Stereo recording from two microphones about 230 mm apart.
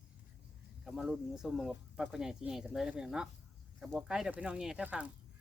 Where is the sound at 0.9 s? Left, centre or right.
Centre.